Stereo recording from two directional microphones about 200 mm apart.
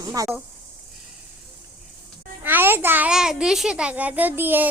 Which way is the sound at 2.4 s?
10° right (ahead or behind).